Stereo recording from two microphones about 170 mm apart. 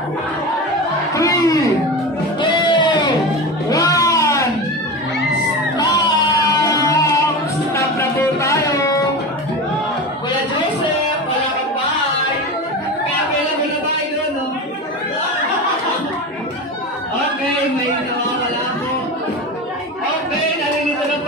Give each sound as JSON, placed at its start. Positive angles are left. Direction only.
{"t": 1.1, "sound": "a sound", "side_deg": 20}
{"t": 2.4, "sound": "music", "side_deg": 25}
{"t": 5.8, "sound": "music", "side_deg": 25}